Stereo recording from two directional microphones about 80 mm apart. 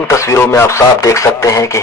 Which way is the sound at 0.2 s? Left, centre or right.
Left.